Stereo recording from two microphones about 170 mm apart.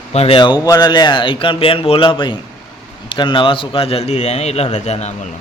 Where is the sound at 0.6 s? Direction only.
25° left (ahead or behind); by 5.2 s 40° left (ahead or behind).